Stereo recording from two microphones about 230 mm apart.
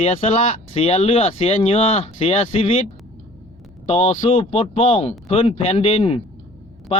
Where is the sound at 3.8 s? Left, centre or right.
Left.